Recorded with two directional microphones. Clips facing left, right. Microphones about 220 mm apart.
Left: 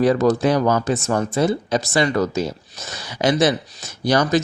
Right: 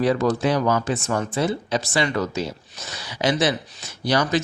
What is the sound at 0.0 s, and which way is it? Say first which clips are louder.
Speech: left 4 dB; 45° left (ahead or behind).